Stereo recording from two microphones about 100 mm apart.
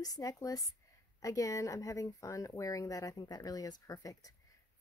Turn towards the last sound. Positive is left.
turn(degrees=35)  # may be behind; listen again after turning